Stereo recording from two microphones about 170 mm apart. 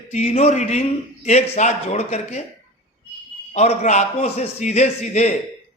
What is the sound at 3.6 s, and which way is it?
A man's voice, 40° left (ahead or behind).